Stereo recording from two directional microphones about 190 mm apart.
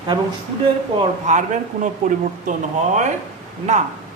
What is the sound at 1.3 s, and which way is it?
Speech, 40° right (ahead or behind).